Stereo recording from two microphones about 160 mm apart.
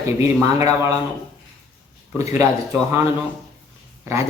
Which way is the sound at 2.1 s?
20° right (ahead or behind).